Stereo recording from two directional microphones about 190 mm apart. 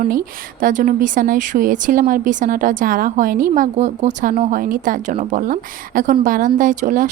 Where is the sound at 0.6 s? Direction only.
45° right (ahead or behind).